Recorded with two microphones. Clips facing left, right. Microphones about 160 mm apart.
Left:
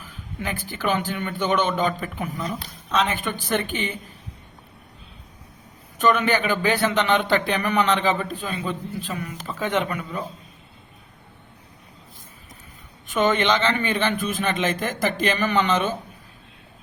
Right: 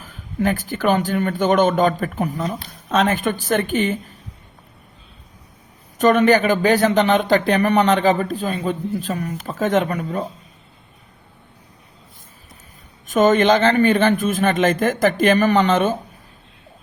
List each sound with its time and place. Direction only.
0.0 s speech: 45° right (ahead or behind)
6.0 s speech: 40° right (ahead or behind)
13.1 s speech: 45° right (ahead or behind)